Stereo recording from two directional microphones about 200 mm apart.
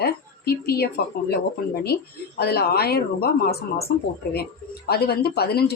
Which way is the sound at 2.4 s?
50° left (ahead or behind).